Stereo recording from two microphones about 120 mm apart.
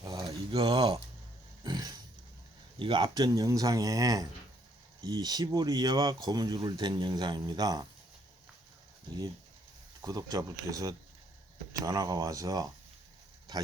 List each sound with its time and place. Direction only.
0.0 s a sound: 35° right (ahead or behind)
1.6 s dog: 35° right (ahead or behind)
2.7 s speech: 40° right (ahead or behind)
10.0 s speech: 35° right (ahead or behind)